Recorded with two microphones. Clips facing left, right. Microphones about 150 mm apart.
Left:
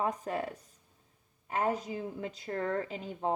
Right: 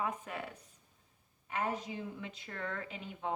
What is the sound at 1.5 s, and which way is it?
A woman's voice, 40° left (ahead or behind).